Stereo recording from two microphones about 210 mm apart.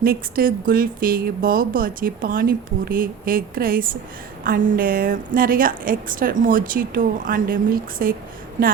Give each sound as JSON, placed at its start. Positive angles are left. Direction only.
{"t": 0.0, "sound": "a woman's voice", "side_deg": -45}